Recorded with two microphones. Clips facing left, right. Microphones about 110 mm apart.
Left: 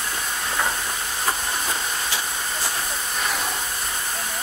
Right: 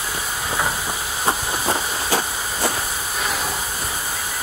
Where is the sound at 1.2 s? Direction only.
45° right (ahead or behind).